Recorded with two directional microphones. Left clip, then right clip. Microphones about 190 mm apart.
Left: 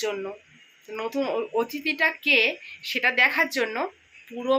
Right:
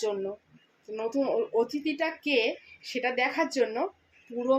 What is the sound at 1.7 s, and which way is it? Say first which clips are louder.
A woman's voice: left 6 dB; 10° right (ahead or behind).